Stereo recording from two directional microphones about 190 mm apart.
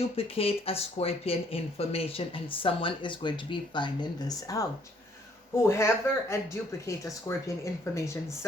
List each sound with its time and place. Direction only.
0.0 s speech: 30° left (ahead or behind)
5.6 s speech: 15° left (ahead or behind)